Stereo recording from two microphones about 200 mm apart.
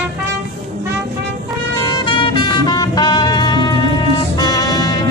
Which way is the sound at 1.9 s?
25° left (ahead or behind).